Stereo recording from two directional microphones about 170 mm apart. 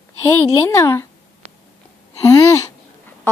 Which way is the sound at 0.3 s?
15° left (ahead or behind).